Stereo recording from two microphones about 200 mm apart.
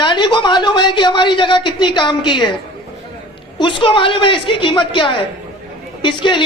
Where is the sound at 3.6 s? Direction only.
25° left (ahead or behind).